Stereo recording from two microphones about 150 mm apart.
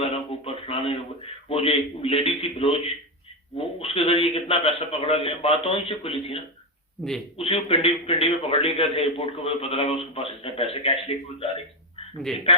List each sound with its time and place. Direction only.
0.0 s a sound: 40° left (ahead or behind)
1.5 s a man's voice: 40° left (ahead or behind)
7.0 s speech: 5° left (ahead or behind)
7.3 s a man's voice: 40° left (ahead or behind)